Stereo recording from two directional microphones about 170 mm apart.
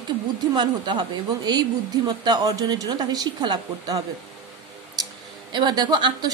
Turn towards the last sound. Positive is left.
turn(degrees=-25)  # may be behind; listen again after turning